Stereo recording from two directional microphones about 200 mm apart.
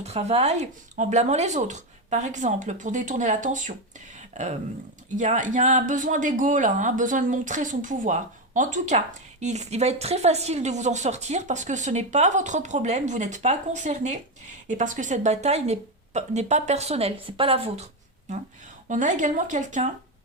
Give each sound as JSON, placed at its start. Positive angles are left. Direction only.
{"t": 0.0, "sound": "a woman's voice", "side_deg": -30}
{"t": 18.9, "sound": "a woman's voice", "side_deg": -40}